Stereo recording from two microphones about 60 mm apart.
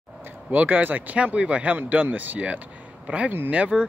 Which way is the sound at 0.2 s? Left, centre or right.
Right.